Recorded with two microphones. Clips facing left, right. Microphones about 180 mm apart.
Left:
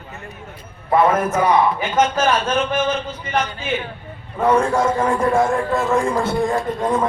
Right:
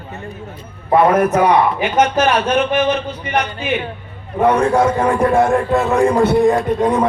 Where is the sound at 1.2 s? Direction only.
65° right (ahead or behind).